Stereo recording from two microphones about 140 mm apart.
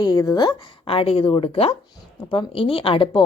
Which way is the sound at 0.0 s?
30° left (ahead or behind).